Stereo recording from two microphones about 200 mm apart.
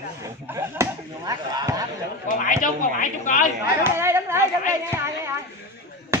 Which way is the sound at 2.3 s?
40° left (ahead or behind).